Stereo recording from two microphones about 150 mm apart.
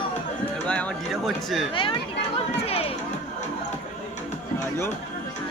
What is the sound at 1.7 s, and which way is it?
Speech, 35° left (ahead or behind).